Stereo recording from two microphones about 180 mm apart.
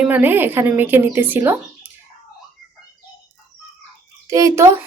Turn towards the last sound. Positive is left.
turn(degrees=-15)  # may be behind; listen again after turning